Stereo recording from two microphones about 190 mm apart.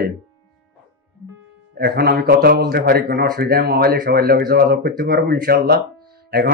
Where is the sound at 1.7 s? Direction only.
55° right (ahead or behind).